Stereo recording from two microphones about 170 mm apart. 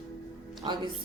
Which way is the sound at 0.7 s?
25° right (ahead or behind).